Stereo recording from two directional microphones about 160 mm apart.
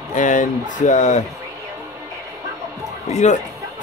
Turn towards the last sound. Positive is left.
turn(degrees=45)  # may be behind; listen again after turning